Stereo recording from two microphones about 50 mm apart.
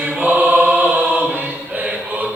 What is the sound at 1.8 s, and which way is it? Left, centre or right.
Mantra, right.